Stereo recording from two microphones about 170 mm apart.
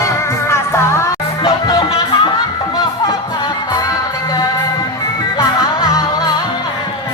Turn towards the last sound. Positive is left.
turn(degrees=20)  # may be behind; listen again after turning